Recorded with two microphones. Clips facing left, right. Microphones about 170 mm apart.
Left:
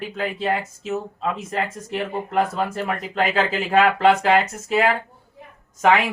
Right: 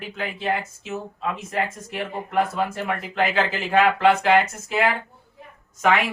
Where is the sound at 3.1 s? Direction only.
35° left (ahead or behind).